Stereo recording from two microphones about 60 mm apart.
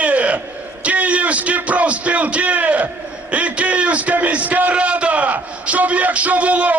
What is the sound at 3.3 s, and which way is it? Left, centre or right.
A man's voice, right.